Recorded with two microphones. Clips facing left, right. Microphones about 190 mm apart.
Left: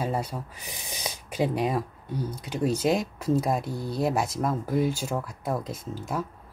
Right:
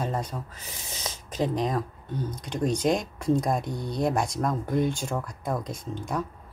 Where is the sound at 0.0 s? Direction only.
10° left (ahead or behind).